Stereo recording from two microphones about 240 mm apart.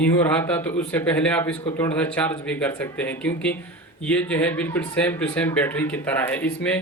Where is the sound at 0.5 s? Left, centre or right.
Centre.